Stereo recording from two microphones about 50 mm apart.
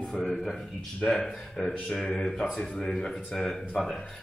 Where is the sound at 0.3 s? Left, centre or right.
Centre.